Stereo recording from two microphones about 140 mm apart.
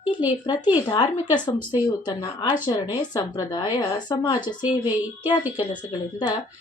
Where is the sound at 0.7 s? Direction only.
35° left (ahead or behind).